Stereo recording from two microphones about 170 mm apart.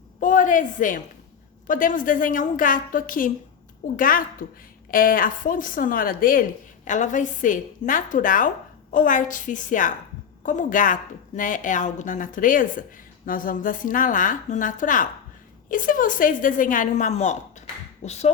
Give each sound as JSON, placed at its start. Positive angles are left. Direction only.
{"t": 0.2, "sound": "a woman's voice", "side_deg": 50}